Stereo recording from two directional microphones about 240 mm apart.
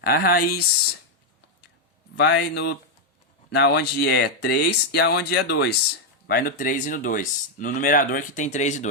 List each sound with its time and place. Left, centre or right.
0.0 s speech: left
2.1 s speech: left